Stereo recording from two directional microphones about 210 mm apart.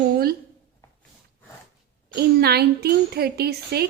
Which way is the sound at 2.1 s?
50° right (ahead or behind).